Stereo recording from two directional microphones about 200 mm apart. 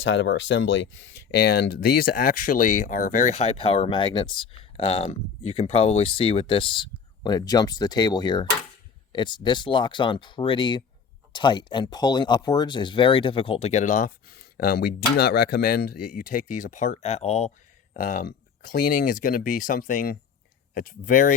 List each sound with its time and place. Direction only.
0.0 s speech: 65° left (ahead or behind); by 21.3 s 40° left (ahead or behind)